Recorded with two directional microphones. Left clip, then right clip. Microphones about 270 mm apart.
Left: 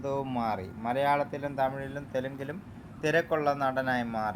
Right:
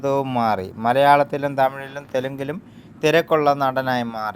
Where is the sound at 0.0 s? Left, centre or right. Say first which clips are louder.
Right 11 dB; right.